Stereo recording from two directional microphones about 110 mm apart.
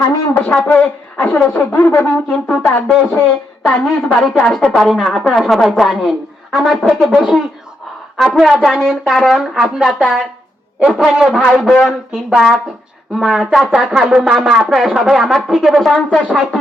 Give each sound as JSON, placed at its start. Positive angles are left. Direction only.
{"t": 0.4, "sound": "speech", "side_deg": 15}
{"t": 1.9, "sound": "a sound", "side_deg": 25}
{"t": 2.3, "sound": "a woman's voice", "side_deg": 10}